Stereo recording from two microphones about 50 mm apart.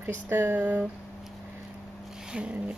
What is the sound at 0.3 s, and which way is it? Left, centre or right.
Speech, right.